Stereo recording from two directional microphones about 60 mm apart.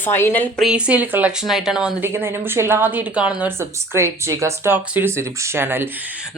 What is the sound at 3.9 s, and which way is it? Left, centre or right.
Speech, right.